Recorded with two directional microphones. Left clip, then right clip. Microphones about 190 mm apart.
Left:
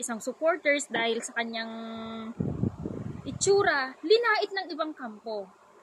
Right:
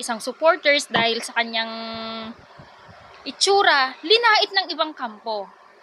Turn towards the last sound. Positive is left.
turn(degrees=15)  # may be behind; listen again after turning